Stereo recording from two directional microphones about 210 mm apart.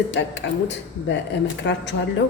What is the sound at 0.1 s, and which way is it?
Speech, 60° left (ahead or behind).